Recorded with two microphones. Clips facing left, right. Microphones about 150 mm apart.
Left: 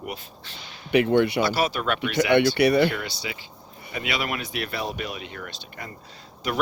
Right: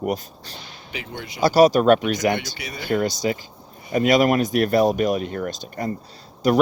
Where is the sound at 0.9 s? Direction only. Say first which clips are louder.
Left 16 dB; 65° left (ahead or behind).